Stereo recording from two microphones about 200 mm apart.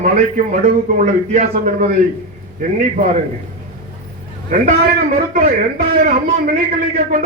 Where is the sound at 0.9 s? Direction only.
40° right (ahead or behind).